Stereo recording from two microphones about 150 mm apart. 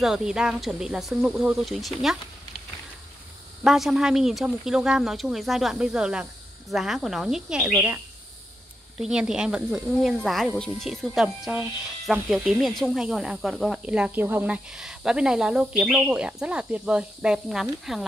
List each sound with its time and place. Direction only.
0.0 s speech: 5° right (ahead or behind)
3.6 s speech: centre (ahead or behind)
7.7 s speech: 15° right (ahead or behind)
8.9 s speech: 5° right (ahead or behind)